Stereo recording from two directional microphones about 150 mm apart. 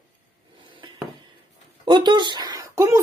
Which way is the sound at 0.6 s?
35° right (ahead or behind).